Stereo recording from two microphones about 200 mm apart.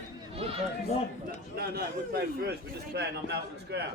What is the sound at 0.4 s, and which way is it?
Goat, 30° right (ahead or behind).